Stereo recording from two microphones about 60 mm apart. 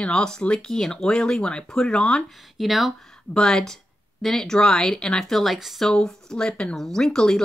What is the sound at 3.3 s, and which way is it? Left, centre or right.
Speech, centre.